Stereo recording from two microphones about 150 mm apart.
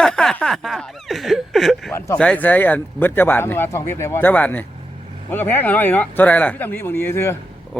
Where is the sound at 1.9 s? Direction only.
20° left (ahead or behind).